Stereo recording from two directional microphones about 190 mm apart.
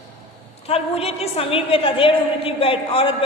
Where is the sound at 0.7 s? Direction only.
30° left (ahead or behind).